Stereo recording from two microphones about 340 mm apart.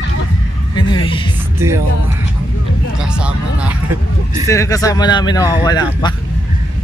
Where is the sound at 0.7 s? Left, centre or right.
Centre.